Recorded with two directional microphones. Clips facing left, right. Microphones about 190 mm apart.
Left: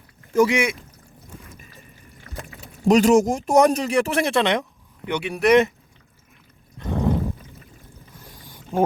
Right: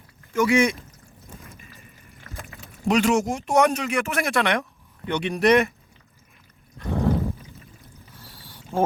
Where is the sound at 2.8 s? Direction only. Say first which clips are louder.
Left 5 dB; 40° left (ahead or behind); by 5.5 s 5° left (ahead or behind).